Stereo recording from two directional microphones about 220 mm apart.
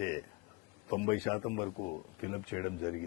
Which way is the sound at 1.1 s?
15° left (ahead or behind).